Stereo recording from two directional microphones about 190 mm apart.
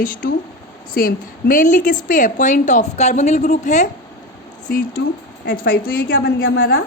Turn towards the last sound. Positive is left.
turn(degrees=55)  # may be behind; listen again after turning